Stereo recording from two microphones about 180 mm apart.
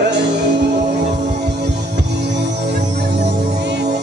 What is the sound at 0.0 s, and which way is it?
Music, 75° right (ahead or behind).